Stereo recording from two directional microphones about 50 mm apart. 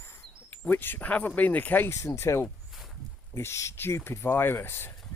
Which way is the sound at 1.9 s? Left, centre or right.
Left.